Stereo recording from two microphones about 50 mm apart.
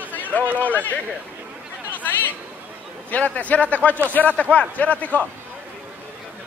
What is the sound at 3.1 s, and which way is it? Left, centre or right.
Speech, left.